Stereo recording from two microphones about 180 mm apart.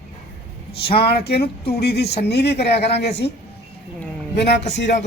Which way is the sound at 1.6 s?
60° left (ahead or behind).